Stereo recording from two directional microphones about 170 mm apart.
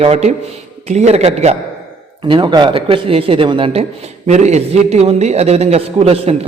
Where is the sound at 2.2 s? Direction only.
30° right (ahead or behind).